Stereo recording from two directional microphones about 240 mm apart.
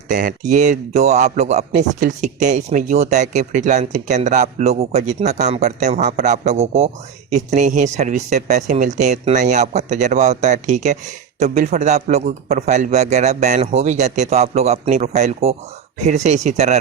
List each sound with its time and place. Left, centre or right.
0.1 s a man's voice: right